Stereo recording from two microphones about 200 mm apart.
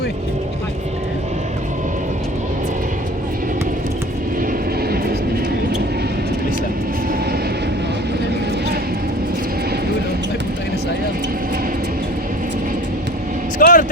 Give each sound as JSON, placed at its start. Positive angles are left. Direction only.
{"t": 13.6, "sound": "vehicle", "side_deg": 40}